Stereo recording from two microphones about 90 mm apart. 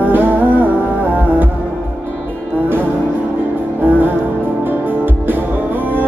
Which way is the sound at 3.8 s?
20° right (ahead or behind).